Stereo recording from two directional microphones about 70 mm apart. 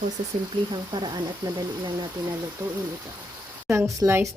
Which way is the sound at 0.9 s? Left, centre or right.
Right.